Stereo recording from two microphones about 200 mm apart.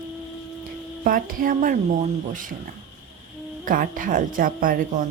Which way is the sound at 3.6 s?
45° right (ahead or behind).